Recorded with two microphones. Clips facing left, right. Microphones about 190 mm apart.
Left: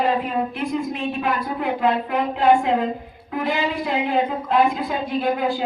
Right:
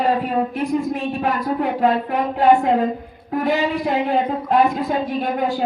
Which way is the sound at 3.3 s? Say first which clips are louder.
Right 4 dB; 40° right (ahead or behind).